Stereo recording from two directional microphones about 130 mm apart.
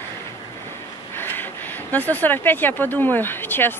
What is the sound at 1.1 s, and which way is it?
Speech, 15° left (ahead or behind).